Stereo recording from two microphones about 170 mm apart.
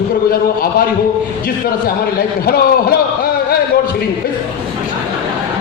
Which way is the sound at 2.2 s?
65° left (ahead or behind).